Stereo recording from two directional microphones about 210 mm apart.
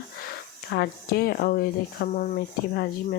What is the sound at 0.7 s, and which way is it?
Speech, 50° left (ahead or behind).